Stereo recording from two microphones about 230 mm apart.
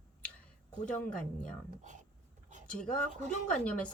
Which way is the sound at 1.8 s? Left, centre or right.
Right.